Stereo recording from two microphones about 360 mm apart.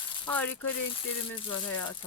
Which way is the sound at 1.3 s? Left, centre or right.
Centre.